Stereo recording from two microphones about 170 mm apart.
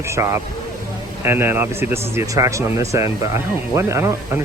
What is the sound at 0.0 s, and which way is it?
Speech, 15° right (ahead or behind).